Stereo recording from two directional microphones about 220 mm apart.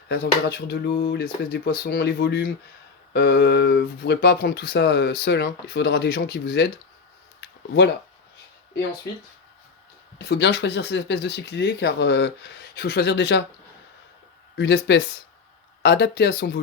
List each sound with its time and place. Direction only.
0.1 s speech: 50° left (ahead or behind)
7.4 s a sound: 50° left (ahead or behind)
10.2 s speech: 50° left (ahead or behind)
14.5 s speech: 50° left (ahead or behind)